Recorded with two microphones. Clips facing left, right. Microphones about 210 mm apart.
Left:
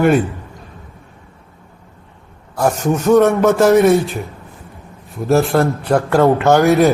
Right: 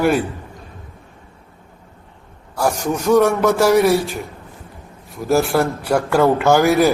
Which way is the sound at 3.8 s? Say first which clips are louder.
Left 4 dB; 20° left (ahead or behind).